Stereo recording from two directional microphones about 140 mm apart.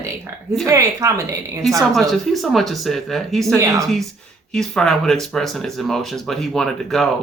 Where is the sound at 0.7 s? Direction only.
25° right (ahead or behind).